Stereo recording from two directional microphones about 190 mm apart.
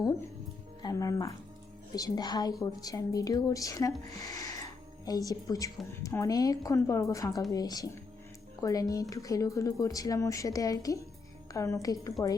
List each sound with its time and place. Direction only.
0.8 s speech: 20° left (ahead or behind)